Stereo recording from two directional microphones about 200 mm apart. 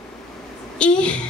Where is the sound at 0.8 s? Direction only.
5° left (ahead or behind).